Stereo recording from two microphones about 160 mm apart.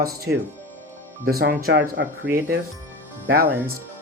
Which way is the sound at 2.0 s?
15° right (ahead or behind).